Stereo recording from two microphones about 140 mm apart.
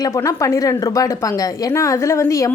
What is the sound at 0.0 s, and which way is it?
A woman's voice, 20° left (ahead or behind).